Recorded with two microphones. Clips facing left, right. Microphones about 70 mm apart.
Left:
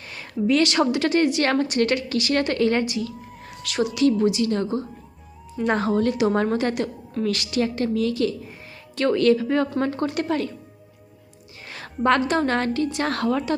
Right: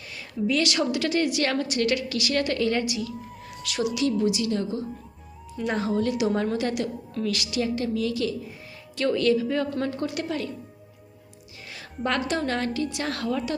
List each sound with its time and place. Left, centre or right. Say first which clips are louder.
0.1 s a woman's voice: left 5 dB; left
11.7 s a woman's voice: left 7 dB; left